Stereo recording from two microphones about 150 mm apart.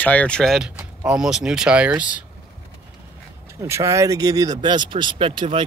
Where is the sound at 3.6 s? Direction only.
20° right (ahead or behind); by 5.7 s 35° right (ahead or behind).